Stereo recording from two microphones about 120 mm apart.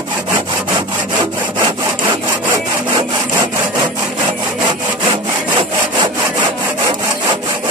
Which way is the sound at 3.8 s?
40° right (ahead or behind).